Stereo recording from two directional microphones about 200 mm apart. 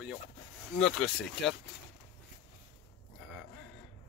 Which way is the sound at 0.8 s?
Centre (ahead or behind).